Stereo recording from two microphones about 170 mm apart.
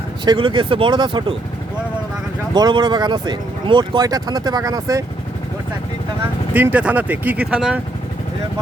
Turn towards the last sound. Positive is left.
turn(degrees=-5)  # may be behind; listen again after turning